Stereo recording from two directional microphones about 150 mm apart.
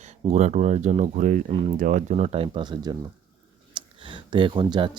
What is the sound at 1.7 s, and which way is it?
Speech, 60° right (ahead or behind).